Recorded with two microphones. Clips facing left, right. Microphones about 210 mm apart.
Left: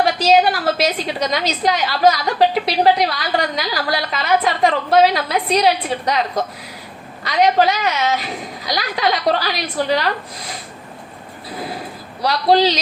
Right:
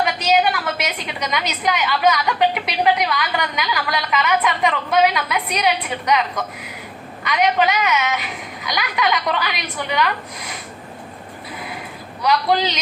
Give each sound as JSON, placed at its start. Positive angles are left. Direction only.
{"t": 0.0, "sound": "a woman's voice", "side_deg": 30}
{"t": 12.2, "sound": "a woman's voice", "side_deg": 35}